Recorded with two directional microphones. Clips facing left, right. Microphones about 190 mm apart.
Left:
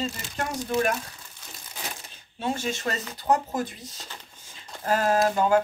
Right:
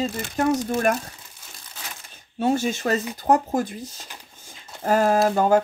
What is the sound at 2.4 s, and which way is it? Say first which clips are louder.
Speech: right 7 dB; 45° right (ahead or behind).